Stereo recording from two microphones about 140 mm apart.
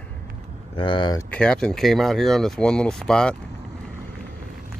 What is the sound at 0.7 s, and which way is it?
Speech, 35° left (ahead or behind).